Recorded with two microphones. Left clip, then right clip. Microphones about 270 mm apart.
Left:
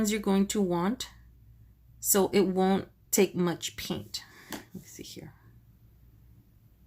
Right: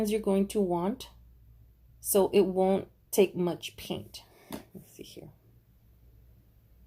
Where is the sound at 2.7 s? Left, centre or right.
Left.